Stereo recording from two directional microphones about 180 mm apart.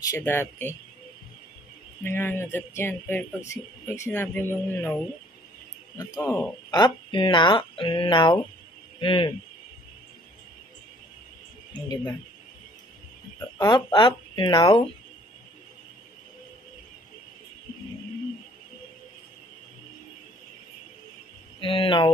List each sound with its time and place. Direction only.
0.0 s speech: 15° left (ahead or behind)
2.0 s speech: 10° left (ahead or behind)
5.9 s speech: 20° left (ahead or behind)
11.7 s speech: 20° left (ahead or behind)
13.6 s speech: 20° left (ahead or behind)
21.5 s speech: 30° left (ahead or behind)